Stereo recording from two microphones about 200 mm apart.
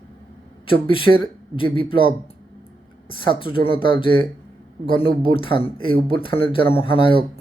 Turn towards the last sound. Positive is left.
turn(degrees=25)  # may be behind; listen again after turning